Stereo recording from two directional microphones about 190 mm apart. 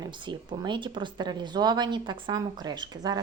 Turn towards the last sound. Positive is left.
turn(degrees=-20)  # may be behind; listen again after turning